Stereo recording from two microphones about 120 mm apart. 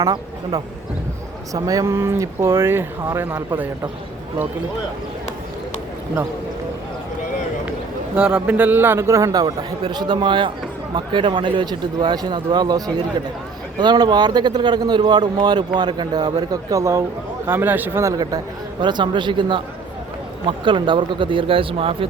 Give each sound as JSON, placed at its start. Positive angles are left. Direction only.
{"t": 0.0, "sound": "speech", "side_deg": -35}
{"t": 8.1, "sound": "a man's voice", "side_deg": -10}
{"t": 9.8, "sound": "speech", "side_deg": -40}